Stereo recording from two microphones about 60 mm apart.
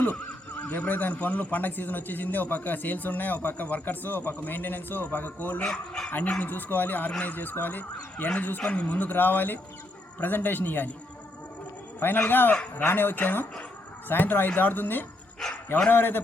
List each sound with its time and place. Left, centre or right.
0.7 s a man's voice: left
5.6 s speech: centre
6.1 s a man's voice: left
11.9 s a man's voice: left